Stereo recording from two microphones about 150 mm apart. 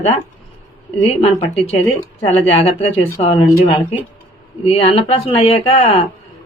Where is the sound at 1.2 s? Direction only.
45° left (ahead or behind).